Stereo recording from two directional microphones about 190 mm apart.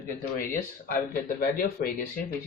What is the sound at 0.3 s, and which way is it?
Speech, 45° left (ahead or behind).